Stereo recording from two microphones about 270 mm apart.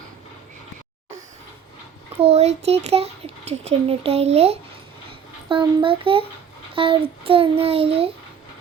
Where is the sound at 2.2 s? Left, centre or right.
Right.